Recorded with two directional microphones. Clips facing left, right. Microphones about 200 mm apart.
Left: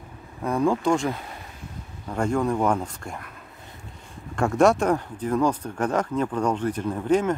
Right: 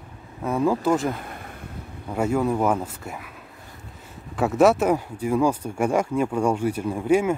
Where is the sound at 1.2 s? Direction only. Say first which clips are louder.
Right 3 dB; 55° right (ahead or behind).